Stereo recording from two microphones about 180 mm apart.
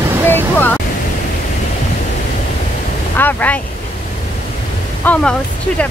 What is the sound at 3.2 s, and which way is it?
Speech, 10° left (ahead or behind).